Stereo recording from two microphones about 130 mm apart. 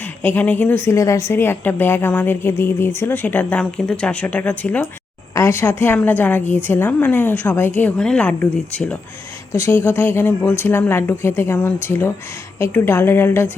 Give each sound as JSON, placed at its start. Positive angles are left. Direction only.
{"t": 0.0, "sound": "a woman's voice", "side_deg": 15}
{"t": 5.3, "sound": "a woman's voice", "side_deg": 20}